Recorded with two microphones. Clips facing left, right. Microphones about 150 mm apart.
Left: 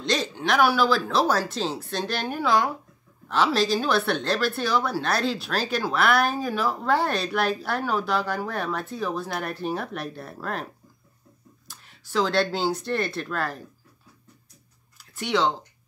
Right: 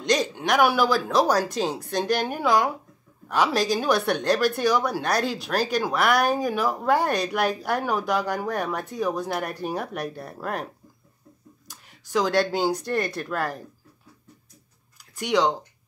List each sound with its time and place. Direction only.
0.0 s speech: 15° right (ahead or behind)
15.2 s speech: 15° right (ahead or behind)